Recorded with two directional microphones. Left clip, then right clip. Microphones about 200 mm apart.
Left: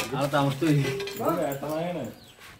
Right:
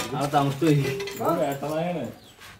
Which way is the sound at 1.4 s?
45° right (ahead or behind).